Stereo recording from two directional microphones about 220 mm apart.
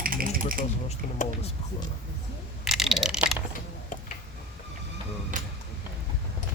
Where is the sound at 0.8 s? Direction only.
30° left (ahead or behind).